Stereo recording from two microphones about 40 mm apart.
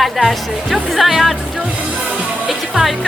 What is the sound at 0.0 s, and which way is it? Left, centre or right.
Speech, centre.